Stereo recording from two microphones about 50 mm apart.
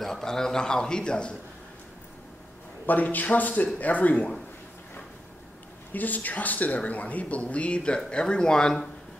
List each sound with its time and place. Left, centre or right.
0.0 s a man's voice: centre
2.9 s speech: left
5.9 s a man's voice: left; by 8.8 s centre